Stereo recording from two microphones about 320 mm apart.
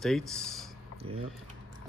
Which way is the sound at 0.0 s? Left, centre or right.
Centre.